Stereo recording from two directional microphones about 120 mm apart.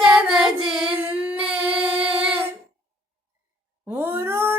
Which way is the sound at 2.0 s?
50° right (ahead or behind).